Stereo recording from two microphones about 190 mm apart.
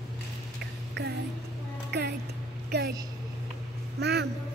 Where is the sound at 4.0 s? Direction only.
60° right (ahead or behind).